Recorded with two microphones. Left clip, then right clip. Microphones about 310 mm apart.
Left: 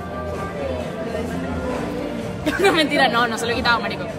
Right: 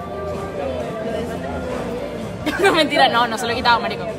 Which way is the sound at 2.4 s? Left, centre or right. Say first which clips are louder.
Right 1 dB; centre.